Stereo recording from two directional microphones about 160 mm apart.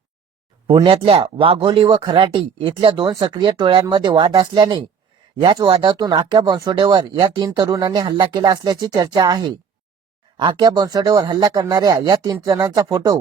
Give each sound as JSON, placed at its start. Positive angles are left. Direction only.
{"t": 0.7, "sound": "speech", "side_deg": -30}